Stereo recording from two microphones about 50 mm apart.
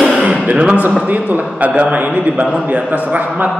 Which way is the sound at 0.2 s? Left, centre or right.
Right.